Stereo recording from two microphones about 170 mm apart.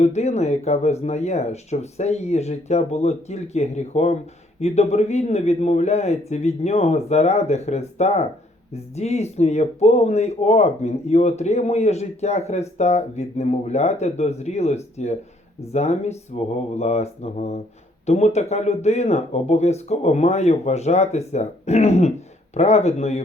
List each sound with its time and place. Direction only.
0.0 s speech: 40° left (ahead or behind)